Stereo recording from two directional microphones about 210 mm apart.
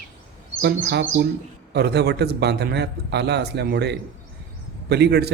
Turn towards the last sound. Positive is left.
turn(degrees=-50)  # may be behind; listen again after turning